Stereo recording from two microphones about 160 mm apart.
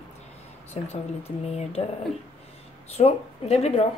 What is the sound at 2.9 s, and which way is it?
Speech, 40° left (ahead or behind).